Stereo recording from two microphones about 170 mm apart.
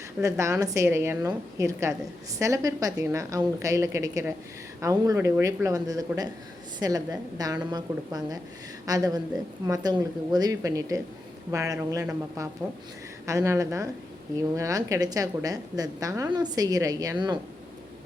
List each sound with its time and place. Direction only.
0.2 s a woman's voice: 15° right (ahead or behind)